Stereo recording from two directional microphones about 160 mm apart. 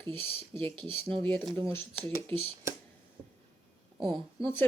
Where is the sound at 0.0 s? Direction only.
15° left (ahead or behind).